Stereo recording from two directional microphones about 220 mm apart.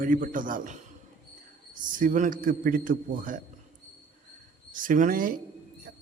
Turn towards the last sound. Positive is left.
turn(degrees=-40)  # may be behind; listen again after turning